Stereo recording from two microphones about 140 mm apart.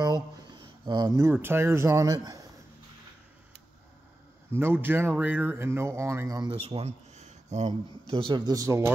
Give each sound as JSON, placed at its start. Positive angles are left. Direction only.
{"t": 0.0, "sound": "speech", "side_deg": -30}
{"t": 4.5, "sound": "speech", "side_deg": -15}
{"t": 6.5, "sound": "speech", "side_deg": -40}
{"t": 8.1, "sound": "a man's voice", "side_deg": -40}
{"t": 8.5, "sound": "a man's voice", "side_deg": -20}